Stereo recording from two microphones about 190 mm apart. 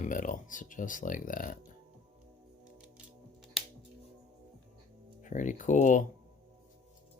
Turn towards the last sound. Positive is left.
turn(degrees=40)  # may be behind; listen again after turning